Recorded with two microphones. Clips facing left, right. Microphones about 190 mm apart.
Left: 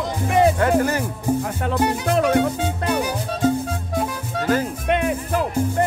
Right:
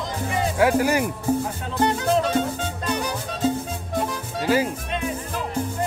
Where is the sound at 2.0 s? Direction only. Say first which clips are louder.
Left 3 dB; 65° left (ahead or behind).